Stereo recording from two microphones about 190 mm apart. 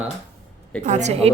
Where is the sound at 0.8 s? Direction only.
35° right (ahead or behind).